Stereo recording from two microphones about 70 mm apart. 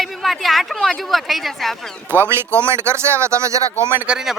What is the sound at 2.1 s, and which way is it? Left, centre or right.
Speech, right.